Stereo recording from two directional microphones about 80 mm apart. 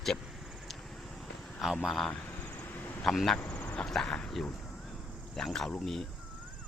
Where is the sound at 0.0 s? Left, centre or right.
Centre.